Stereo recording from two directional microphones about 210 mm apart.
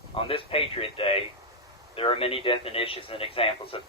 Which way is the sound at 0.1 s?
25° left (ahead or behind).